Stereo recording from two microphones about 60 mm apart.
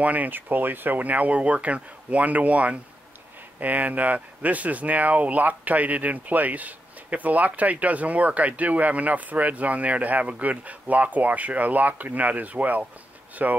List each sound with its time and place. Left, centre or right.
0.0 s speech: right